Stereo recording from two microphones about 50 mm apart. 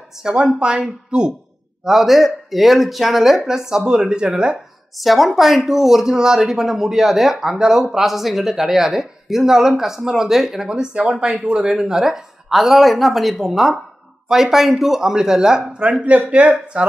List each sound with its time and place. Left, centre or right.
0.2 s speech: centre
1.9 s speech: centre
4.9 s speech: centre
15.8 s speech: right